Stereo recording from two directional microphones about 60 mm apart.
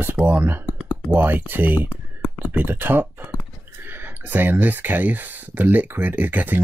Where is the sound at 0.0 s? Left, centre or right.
Right.